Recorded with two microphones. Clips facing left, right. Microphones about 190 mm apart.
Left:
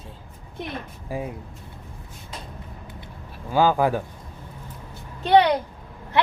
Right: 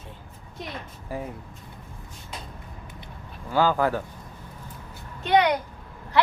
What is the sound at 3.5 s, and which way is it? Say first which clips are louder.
Speech: left 3 dB; 15° left (ahead or behind).